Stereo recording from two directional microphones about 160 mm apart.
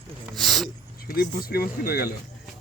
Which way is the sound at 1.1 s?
70° left (ahead or behind).